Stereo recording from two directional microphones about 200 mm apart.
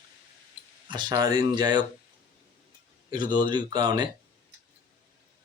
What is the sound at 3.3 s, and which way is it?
Speech, 20° right (ahead or behind).